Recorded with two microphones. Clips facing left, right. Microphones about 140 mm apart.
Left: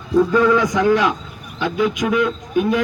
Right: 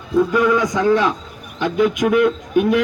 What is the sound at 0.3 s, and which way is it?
Speech, 15° right (ahead or behind).